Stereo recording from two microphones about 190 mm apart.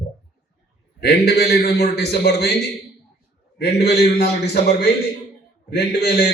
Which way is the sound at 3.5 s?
55° left (ahead or behind).